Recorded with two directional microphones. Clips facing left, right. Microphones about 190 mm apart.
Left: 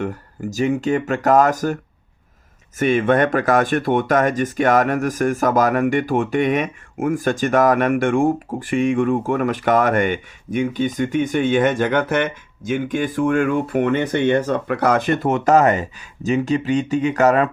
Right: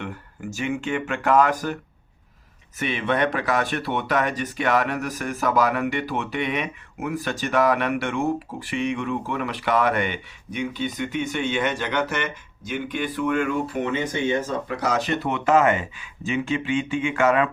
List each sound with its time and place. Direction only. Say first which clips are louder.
0.0 s speech: left 8 dB; 40° left (ahead or behind)